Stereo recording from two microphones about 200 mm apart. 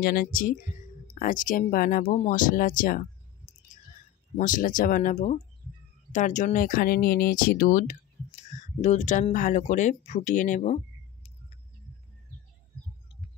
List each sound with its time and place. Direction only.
0.0 s speech: 45° left (ahead or behind)
4.4 s speech: 40° left (ahead or behind)